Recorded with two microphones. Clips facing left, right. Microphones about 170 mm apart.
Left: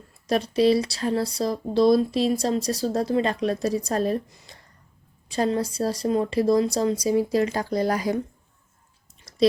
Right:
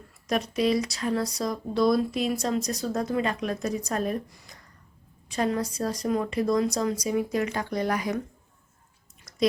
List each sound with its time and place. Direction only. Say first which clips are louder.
0.3 s speech: left 5 dB; 30° left (ahead or behind)
9.3 s whispering: left 2 dB; 30° left (ahead or behind)